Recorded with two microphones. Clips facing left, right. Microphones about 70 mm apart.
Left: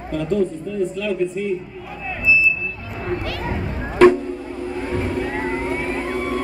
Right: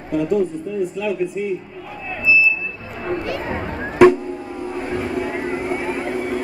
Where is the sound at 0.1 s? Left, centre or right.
Centre.